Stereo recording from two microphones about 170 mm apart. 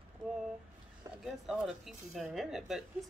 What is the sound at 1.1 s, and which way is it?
Vehicle, 20° right (ahead or behind).